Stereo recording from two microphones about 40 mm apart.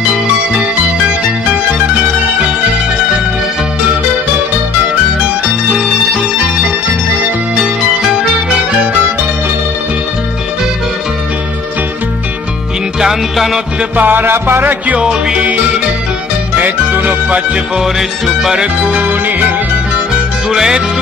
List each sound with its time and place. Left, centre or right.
13.0 s music: centre
13.9 s music: right
15.0 s music: centre
16.5 s music: right
17.8 s music: centre
18.9 s music: right
20.4 s music: centre